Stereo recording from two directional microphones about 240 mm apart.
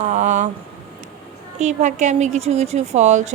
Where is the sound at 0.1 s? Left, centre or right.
Right.